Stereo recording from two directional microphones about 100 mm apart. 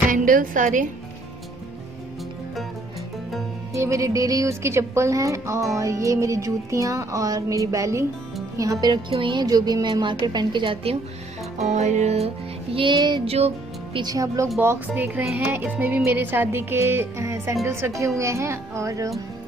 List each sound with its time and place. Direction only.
3.7 s a woman's voice: 30° right (ahead or behind)
9.1 s a woman's voice: 55° right (ahead or behind)
11.5 s music: 90° right
12.7 s a woman's voice: 55° right (ahead or behind)
13.2 s music: 90° right
14.0 s a woman's voice: 35° right (ahead or behind)
15.0 s music: 15° right (ahead or behind)
16.1 s speech: 20° right (ahead or behind)